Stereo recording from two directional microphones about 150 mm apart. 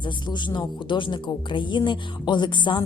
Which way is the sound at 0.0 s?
30° left (ahead or behind).